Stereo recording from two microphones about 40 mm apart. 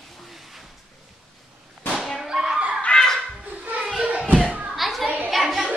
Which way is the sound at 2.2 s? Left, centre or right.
Centre.